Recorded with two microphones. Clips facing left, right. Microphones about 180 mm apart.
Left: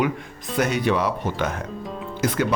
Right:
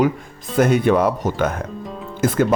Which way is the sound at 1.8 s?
Centre (ahead or behind).